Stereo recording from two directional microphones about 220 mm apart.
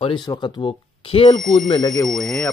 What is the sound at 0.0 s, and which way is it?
Speech, 20° left (ahead or behind).